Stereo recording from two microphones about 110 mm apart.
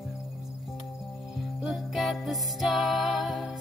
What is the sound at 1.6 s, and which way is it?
Music, centre (ahead or behind).